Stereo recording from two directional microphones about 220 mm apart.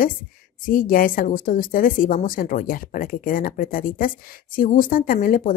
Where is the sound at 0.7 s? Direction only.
40° left (ahead or behind).